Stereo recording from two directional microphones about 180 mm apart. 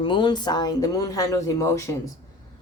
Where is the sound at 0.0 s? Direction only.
25° left (ahead or behind).